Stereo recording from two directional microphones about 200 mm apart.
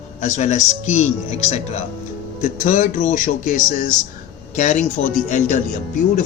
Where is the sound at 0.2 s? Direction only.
35° left (ahead or behind).